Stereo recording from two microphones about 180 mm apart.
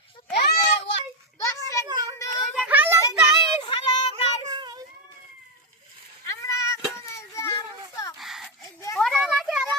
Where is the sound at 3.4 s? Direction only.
25° left (ahead or behind).